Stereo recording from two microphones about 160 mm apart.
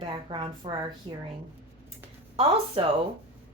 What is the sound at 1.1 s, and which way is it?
Female singing, 35° right (ahead or behind).